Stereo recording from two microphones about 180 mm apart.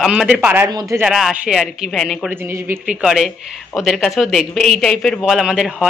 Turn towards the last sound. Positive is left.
turn(degrees=-5)  # may be behind; listen again after turning